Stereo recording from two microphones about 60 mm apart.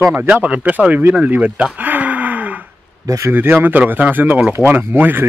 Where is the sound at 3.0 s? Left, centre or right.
Right.